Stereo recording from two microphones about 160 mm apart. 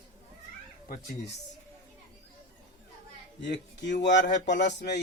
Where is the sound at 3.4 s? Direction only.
90° left.